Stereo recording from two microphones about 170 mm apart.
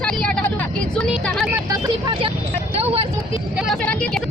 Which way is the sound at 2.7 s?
35° right (ahead or behind).